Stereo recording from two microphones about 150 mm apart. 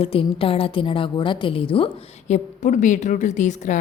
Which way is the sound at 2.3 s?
55° left (ahead or behind).